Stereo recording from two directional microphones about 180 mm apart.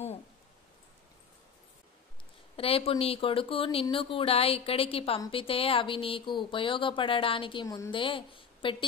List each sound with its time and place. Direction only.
2.5 s speech: 30° left (ahead or behind)